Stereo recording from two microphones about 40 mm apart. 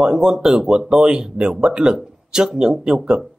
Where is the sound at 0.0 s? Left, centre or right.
Centre.